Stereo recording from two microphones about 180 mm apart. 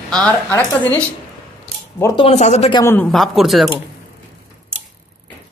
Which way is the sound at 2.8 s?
10° left (ahead or behind).